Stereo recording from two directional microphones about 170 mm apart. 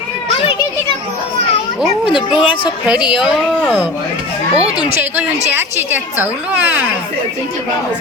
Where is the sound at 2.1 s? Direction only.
30° left (ahead or behind).